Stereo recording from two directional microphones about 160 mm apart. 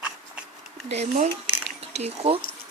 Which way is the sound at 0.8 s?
45° right (ahead or behind).